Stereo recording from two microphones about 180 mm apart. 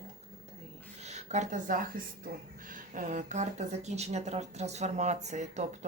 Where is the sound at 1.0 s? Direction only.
40° right (ahead or behind).